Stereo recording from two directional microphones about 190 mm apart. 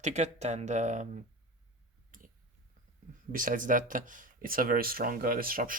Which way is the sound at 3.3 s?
45° right (ahead or behind).